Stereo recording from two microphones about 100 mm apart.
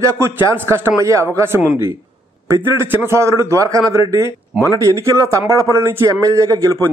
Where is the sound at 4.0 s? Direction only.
50° left (ahead or behind).